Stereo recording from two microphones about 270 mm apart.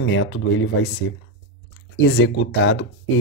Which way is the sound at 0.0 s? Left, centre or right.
Left.